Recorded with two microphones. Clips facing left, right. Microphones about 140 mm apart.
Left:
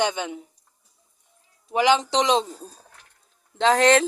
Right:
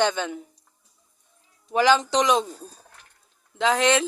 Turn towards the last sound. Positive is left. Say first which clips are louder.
# left 3 dB
turn(degrees=35)  # may be behind; listen again after turning